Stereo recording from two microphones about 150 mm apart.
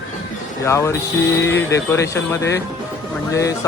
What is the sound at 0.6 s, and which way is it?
A man's voice, 20° left (ahead or behind).